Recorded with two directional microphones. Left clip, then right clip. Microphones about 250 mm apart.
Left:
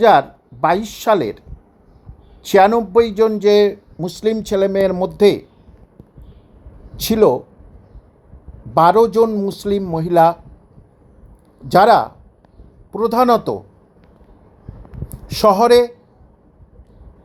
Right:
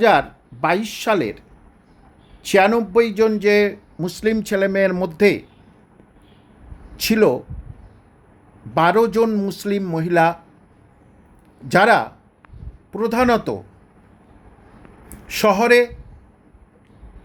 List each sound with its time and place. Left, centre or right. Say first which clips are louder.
0.0 s speech: left 4 dB; centre
6.9 s speech: left 3 dB; centre
8.7 s a man's voice: left 4 dB; centre
11.7 s speech: left 4 dB; centre
15.3 s speech: left 3 dB; centre